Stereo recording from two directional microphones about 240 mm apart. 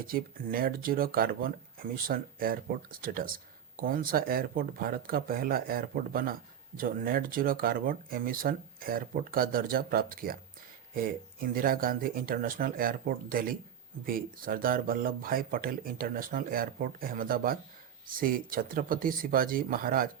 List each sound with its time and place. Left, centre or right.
0.1 s speech: right